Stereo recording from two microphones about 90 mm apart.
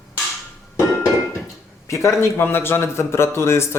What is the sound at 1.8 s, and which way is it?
A man's voice, 35° left (ahead or behind).